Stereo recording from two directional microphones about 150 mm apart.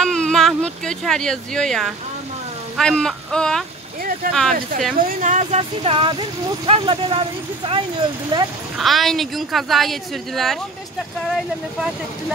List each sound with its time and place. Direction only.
0.0 s a woman's voice: 5° left (ahead or behind)
5.0 s speech: 55° right (ahead or behind); by 8.5 s 30° right (ahead or behind)
8.7 s a woman's voice: centre (ahead or behind)